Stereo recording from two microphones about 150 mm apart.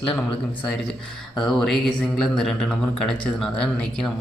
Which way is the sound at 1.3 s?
Centre (ahead or behind).